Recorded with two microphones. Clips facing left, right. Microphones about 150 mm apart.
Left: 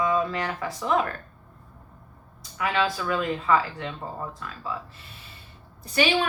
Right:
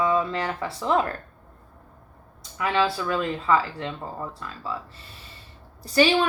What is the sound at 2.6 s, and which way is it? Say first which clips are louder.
Speech: right 2 dB; 30° right (ahead or behind).